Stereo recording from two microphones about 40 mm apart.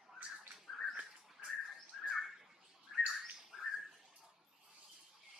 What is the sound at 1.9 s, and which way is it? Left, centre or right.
Bird, centre.